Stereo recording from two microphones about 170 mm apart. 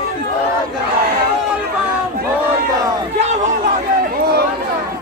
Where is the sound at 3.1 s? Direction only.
45° right (ahead or behind).